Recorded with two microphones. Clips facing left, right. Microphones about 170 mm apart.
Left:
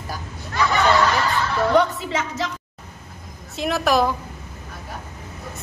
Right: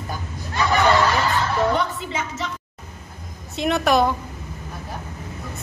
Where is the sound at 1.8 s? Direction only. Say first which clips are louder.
Left 5 dB; 75° left (ahead or behind).